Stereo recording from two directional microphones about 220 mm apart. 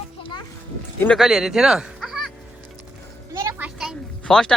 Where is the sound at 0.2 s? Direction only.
20° left (ahead or behind).